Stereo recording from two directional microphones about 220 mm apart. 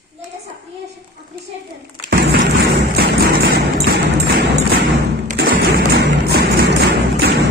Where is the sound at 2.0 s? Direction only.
45° right (ahead or behind).